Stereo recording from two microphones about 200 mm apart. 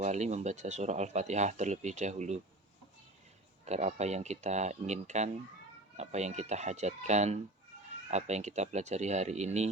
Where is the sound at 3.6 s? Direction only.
35° right (ahead or behind).